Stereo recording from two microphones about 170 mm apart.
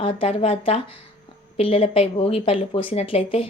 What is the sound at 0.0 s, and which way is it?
A woman's voice, 35° left (ahead or behind).